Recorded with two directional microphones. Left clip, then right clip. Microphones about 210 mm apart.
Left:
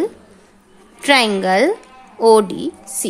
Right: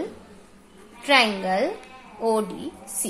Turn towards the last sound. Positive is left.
turn(degrees=50)  # may be behind; listen again after turning